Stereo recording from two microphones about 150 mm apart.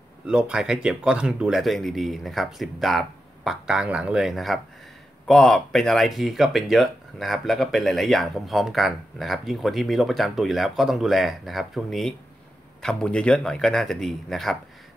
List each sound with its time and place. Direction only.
0.3 s speech: 5° right (ahead or behind)